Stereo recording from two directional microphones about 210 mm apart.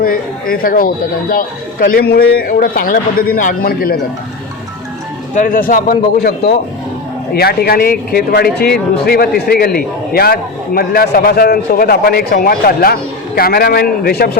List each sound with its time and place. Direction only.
0.0 s a man's voice: 45° left (ahead or behind)
5.3 s a man's voice: 40° left (ahead or behind)